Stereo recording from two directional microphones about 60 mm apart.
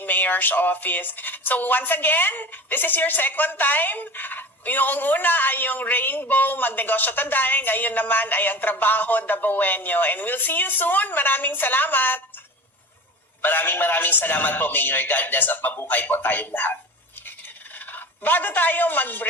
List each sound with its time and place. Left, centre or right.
0.0 s speech: left
13.4 s speech: left
17.7 s speech: left